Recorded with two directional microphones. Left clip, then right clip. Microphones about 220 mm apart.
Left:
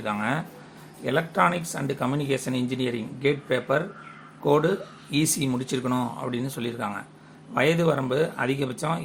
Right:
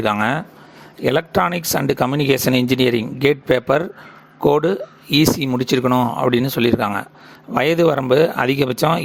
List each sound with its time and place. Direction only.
0.0 s speech: 50° right (ahead or behind)